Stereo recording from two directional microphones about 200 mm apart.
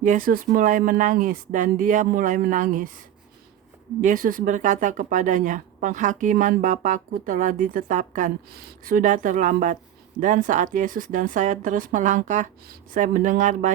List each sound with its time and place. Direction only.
0.0 s speech: 40° right (ahead or behind)
4.0 s speech: 45° right (ahead or behind)